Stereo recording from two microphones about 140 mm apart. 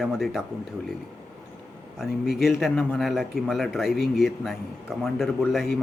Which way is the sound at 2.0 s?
Centre (ahead or behind).